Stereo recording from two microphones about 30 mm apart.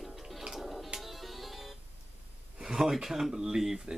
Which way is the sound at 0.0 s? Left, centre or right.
Centre.